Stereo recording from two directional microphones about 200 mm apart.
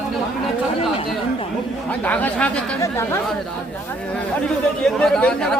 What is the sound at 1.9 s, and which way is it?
Speech, 10° left (ahead or behind).